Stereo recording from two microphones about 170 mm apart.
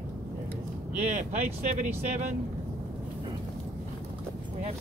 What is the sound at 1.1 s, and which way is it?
Speech, 50° right (ahead or behind).